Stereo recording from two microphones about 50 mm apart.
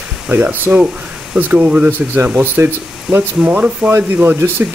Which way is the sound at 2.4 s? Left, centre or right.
Right.